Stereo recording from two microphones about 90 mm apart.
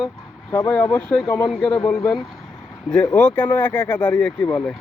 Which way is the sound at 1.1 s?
15° left (ahead or behind).